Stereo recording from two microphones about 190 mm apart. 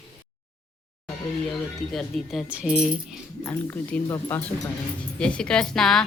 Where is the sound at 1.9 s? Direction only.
Centre (ahead or behind).